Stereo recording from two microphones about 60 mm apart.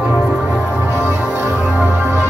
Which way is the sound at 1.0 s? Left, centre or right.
Right.